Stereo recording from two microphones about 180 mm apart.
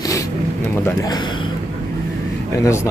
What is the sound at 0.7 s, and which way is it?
Speech, 20° left (ahead or behind).